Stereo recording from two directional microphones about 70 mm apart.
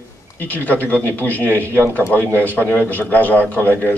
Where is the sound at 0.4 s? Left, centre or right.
Left.